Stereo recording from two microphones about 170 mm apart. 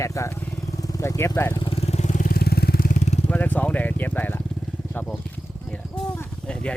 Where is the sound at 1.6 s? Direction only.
35° left (ahead or behind).